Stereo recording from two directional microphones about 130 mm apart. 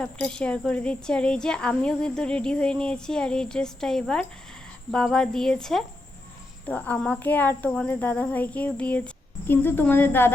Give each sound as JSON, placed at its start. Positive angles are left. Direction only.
{"t": 0.0, "sound": "a woman's voice", "side_deg": 5}